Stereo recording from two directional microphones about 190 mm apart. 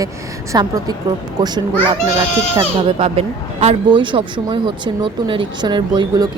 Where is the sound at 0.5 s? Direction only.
20° right (ahead or behind).